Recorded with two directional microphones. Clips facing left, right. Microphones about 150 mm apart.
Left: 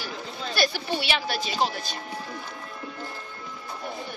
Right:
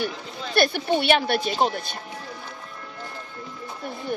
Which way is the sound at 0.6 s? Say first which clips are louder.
Right 6 dB; 55° right (ahead or behind).